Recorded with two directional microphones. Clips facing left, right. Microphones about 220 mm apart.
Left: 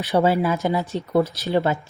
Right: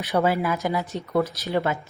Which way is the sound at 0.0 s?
30° left (ahead or behind).